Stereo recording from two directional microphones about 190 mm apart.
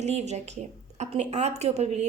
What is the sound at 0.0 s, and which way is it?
A woman's voice, 35° right (ahead or behind).